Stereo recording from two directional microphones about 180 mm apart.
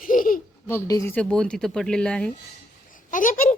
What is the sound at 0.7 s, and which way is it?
Speech, 15° left (ahead or behind).